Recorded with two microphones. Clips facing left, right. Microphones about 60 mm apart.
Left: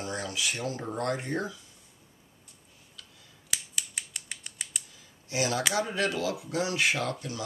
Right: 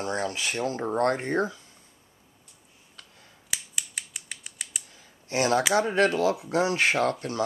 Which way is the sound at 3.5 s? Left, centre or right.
Centre.